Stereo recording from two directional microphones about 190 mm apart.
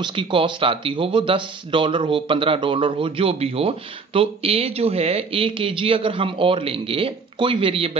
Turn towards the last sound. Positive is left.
turn(degrees=-30)  # may be behind; listen again after turning